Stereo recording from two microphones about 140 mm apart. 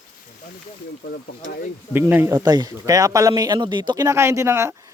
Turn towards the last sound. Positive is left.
turn(degrees=-20)  # may be behind; listen again after turning